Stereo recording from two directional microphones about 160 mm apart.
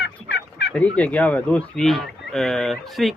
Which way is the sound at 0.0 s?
90° left.